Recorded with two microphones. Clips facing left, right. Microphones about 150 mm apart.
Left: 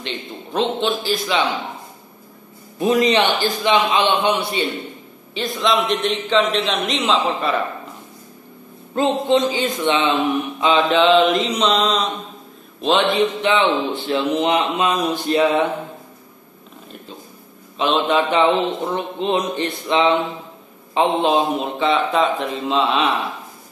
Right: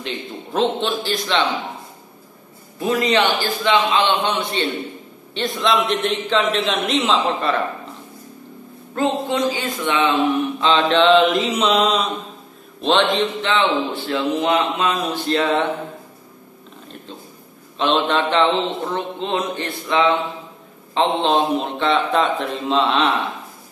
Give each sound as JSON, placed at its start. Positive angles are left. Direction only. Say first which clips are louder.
{"t": 0.0, "sound": "a man's voice", "louder": "right 1 dB", "side_deg": 0}
{"t": 2.8, "sound": "a man's voice", "louder": "left 2 dB", "side_deg": 20}
{"t": 8.9, "sound": "speech", "louder": "left 3 dB", "side_deg": 20}
{"t": 10.6, "sound": "a man's voice", "louder": "left 1 dB", "side_deg": 10}
{"t": 12.8, "sound": "a man's voice", "louder": "even", "side_deg": 5}
{"t": 13.4, "sound": "a man's voice", "louder": "left 2 dB", "side_deg": 15}
{"t": 17.7, "sound": "a man's voice", "louder": "left 1 dB", "side_deg": 5}